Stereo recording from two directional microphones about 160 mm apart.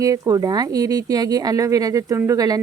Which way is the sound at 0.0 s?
20° right (ahead or behind).